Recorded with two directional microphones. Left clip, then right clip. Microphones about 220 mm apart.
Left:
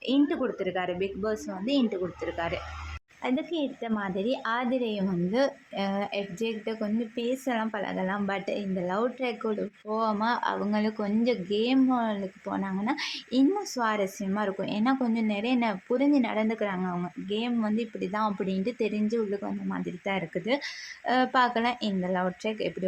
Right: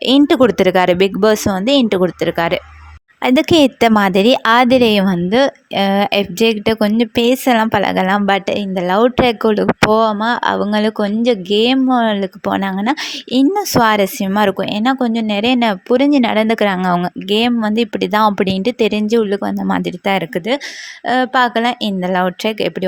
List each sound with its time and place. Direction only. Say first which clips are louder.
0.0 s a woman's voice: right 16 dB; 45° right (ahead or behind)